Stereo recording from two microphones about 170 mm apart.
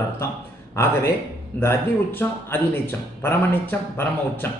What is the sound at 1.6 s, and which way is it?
Speech, 15° left (ahead or behind).